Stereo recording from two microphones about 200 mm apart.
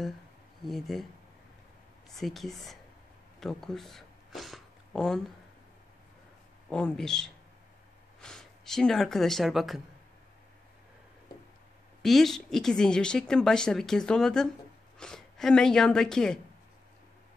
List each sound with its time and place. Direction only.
0.7 s a woman's voice: centre (ahead or behind)
2.1 s a woman's voice: centre (ahead or behind)
6.7 s a woman's voice: 5° left (ahead or behind)
12.0 s a woman's voice: centre (ahead or behind)